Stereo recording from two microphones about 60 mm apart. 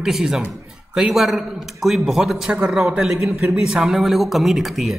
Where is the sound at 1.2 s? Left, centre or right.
Centre.